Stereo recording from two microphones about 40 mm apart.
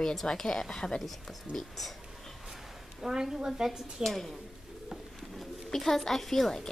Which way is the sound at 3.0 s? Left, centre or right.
Centre.